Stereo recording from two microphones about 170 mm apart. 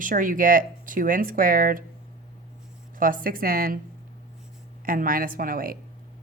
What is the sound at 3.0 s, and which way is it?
Speech, 55° right (ahead or behind).